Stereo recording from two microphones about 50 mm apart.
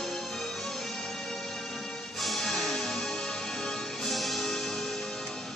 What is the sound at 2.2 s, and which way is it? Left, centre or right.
Music, centre.